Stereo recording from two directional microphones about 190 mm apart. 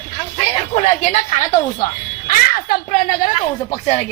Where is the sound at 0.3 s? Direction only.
30° left (ahead or behind).